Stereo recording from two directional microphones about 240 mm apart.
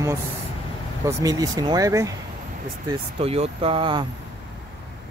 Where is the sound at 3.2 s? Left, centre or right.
Right.